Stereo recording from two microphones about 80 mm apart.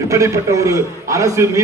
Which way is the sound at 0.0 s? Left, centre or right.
Right.